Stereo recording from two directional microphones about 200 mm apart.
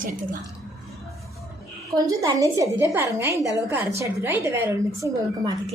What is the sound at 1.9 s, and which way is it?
A woman's voice, 20° right (ahead or behind).